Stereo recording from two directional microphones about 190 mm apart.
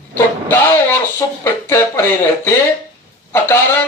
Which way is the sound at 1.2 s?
15° left (ahead or behind).